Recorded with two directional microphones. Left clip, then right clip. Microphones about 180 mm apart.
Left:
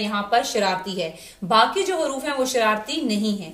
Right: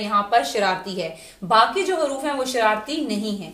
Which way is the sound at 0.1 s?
25° right (ahead or behind).